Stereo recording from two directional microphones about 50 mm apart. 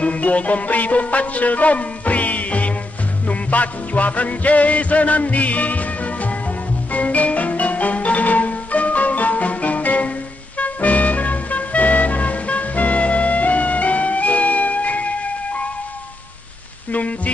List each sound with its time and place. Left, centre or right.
0.0 s music: left
16.9 s rain on surface: left